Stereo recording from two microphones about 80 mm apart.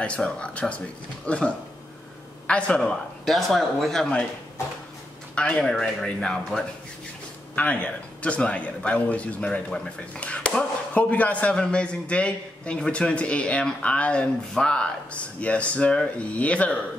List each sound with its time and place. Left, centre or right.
0.0 s a man's voice: centre
3.3 s speech: centre
5.3 s a man's voice: centre
7.5 s a man's voice: centre